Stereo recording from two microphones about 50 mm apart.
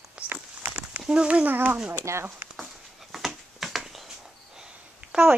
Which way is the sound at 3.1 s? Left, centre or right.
Centre.